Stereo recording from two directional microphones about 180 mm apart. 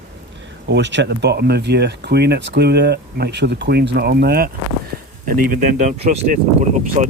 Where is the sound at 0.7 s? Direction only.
80° right; by 4.5 s 60° right (ahead or behind).